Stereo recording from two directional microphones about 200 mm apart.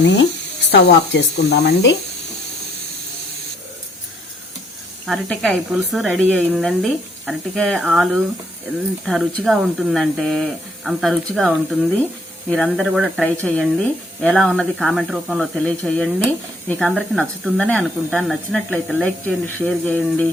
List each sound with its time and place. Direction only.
0.0 s speech: 60° left (ahead or behind)
5.0 s speech: centre (ahead or behind)